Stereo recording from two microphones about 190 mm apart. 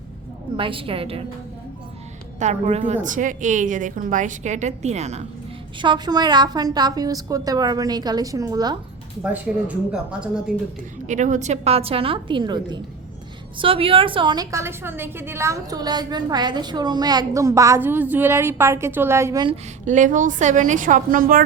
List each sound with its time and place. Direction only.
0.5 s a woman's voice: 25° right (ahead or behind)
2.4 s a woman's voice: 35° right (ahead or behind)
5.8 s a woman's voice: 25° right (ahead or behind)
9.2 s speech: 5° right (ahead or behind)
11.0 s a woman's voice: 40° right (ahead or behind); by 19.5 s 20° right (ahead or behind)
19.8 s a woman's voice: 40° right (ahead or behind)